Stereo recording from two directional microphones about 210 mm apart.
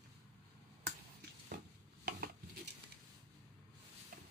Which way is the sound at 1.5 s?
45° right (ahead or behind).